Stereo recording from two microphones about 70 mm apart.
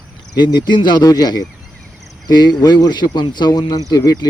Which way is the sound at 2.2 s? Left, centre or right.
Left.